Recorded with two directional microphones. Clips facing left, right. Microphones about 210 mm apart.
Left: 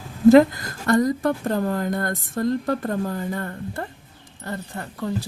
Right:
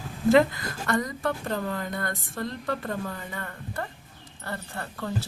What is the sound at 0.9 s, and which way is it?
Speech, 35° left (ahead or behind).